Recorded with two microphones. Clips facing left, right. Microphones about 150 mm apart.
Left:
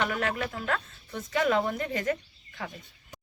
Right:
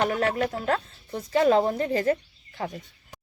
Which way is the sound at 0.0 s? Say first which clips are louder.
Right 5 dB; 35° right (ahead or behind).